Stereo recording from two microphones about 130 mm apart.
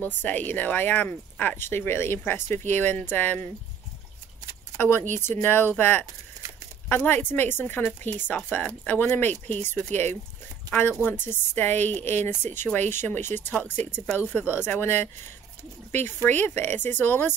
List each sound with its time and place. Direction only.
0.0 s speech: 15° left (ahead or behind)
4.7 s speech: 20° left (ahead or behind)
14.6 s speech: 15° left (ahead or behind)